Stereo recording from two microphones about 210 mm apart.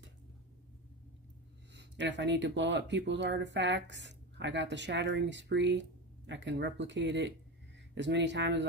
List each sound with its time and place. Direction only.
1.8 s speech: 55° right (ahead or behind)